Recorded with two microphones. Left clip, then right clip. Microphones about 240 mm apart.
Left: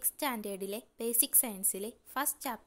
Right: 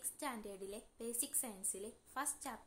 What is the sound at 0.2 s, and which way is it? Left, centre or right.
A woman's voice, left.